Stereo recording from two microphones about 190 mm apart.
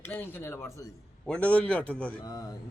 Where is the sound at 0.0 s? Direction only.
10° left (ahead or behind).